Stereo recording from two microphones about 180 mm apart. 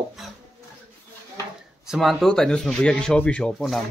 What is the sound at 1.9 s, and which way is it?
A man's voice, centre (ahead or behind).